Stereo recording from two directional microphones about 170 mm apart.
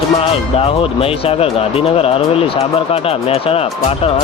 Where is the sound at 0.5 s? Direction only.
35° left (ahead or behind).